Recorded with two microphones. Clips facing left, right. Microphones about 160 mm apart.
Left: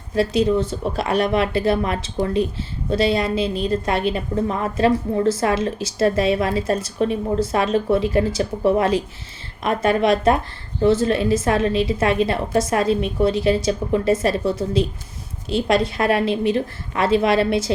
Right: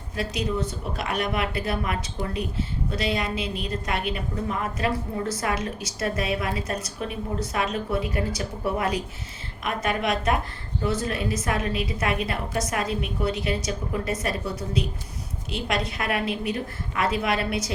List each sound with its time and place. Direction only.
0.2 s a woman's voice: 30° left (ahead or behind)
15.4 s a woman's voice: 30° left (ahead or behind)